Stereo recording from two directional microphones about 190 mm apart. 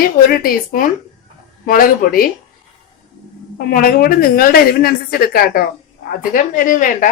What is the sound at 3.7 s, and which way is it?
Speech, 50° left (ahead or behind).